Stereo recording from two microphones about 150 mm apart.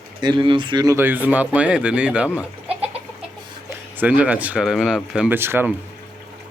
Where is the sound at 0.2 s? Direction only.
30° right (ahead or behind).